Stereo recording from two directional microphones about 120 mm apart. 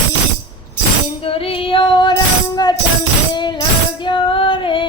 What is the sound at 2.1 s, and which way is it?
Music, 35° left (ahead or behind).